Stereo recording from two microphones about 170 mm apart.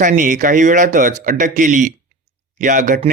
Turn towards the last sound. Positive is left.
turn(degrees=-50)  # may be behind; listen again after turning